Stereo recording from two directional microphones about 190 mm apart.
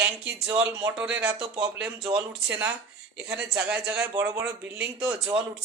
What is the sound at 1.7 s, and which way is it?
Speech, 5° right (ahead or behind).